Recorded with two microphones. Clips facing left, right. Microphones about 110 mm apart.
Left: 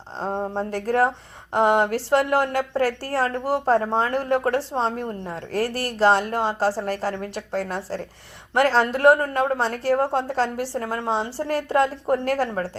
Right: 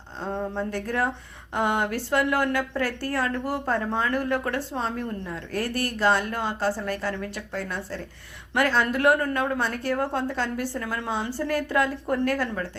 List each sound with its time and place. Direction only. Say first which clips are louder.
0.2 s a woman's voice: left 3 dB; 35° left (ahead or behind)